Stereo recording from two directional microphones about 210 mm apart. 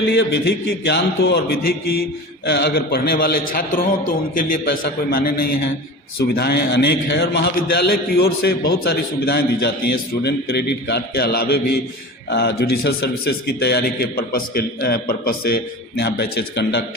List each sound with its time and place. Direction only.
0.1 s a man's voice: 50° left (ahead or behind)